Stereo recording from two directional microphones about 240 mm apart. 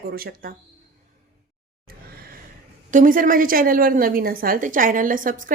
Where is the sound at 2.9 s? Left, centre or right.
Right.